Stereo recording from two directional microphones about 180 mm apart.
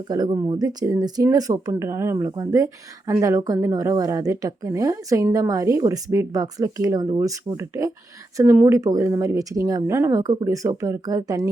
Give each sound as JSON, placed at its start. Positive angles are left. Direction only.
{"t": 0.1, "sound": "a woman's voice", "side_deg": -20}